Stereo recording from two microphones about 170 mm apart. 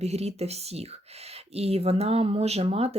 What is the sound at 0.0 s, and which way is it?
Speech, 40° right (ahead or behind).